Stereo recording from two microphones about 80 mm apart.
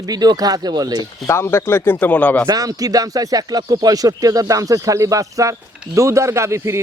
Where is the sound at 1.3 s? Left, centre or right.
Left.